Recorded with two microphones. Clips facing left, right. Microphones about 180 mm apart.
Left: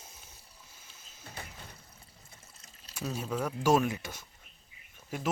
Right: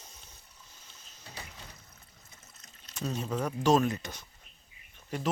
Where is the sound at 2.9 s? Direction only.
10° left (ahead or behind).